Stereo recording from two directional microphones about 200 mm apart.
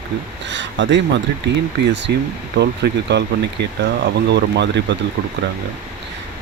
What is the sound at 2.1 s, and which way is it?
Speech, 55° right (ahead or behind).